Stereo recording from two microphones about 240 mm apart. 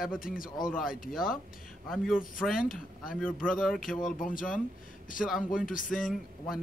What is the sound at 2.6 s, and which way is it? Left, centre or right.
Speech, left.